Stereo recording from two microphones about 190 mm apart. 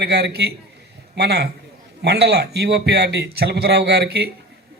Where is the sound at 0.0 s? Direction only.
60° right (ahead or behind).